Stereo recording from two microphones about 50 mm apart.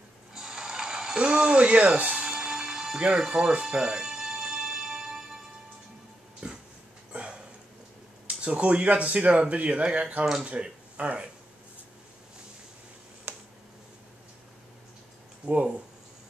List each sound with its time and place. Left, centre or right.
0.3 s mechanisms: centre
2.1 s music: centre
3.2 s speech: centre
4.4 s music: centre
6.4 s a sound: right
8.3 s speech: right
13.3 s a sound: right
15.4 s speech: right